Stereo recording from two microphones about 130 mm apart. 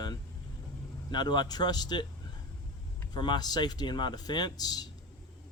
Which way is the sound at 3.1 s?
35° left (ahead or behind).